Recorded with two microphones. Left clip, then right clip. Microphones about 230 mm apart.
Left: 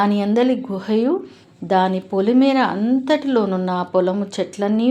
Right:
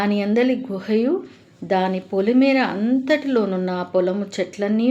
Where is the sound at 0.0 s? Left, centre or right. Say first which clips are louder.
Left 2 dB; centre.